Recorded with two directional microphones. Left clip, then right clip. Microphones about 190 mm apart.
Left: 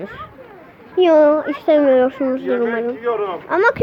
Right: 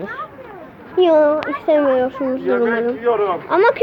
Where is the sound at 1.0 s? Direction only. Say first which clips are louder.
Left 1 dB; 20° left (ahead or behind).